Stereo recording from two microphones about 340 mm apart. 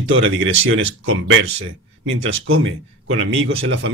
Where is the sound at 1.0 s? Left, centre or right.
Right.